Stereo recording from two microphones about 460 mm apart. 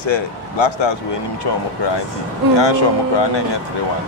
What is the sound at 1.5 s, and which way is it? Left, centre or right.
Speech, left.